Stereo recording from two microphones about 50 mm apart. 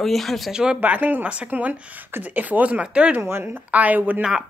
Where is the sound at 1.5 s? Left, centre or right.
Right.